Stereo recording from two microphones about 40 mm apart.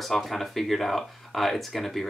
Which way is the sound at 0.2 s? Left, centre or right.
Centre.